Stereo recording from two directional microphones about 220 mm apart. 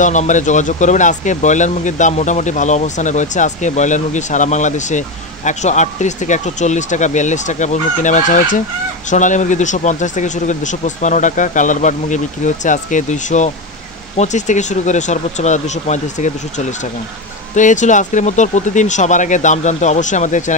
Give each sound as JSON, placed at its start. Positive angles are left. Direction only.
{"t": 0.0, "sound": "speech", "side_deg": 35}